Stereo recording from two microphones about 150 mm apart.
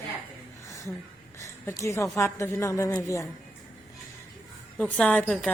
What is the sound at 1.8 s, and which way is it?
A woman's voice, 20° left (ahead or behind).